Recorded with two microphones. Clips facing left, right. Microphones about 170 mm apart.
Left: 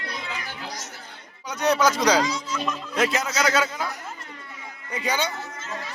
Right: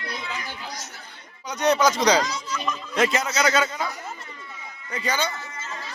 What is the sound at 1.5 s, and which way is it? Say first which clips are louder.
Speech: right 1 dB; 5° left (ahead or behind).